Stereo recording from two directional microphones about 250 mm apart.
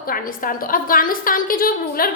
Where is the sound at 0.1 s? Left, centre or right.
Left.